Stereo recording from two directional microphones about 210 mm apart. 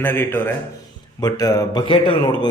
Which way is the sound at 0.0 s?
10° left (ahead or behind).